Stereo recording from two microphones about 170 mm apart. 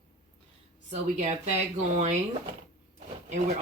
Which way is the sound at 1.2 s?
40° right (ahead or behind).